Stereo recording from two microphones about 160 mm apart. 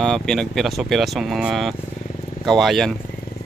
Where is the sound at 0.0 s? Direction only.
Centre (ahead or behind).